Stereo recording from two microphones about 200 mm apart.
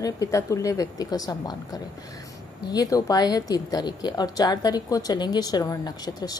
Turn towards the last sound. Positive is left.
turn(degrees=20)  # may be behind; listen again after turning